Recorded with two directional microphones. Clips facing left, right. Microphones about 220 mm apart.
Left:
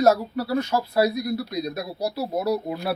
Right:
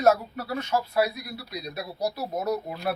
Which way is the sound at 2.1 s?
35° left (ahead or behind).